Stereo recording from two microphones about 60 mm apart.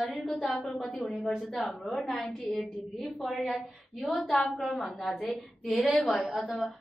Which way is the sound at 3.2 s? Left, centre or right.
Centre.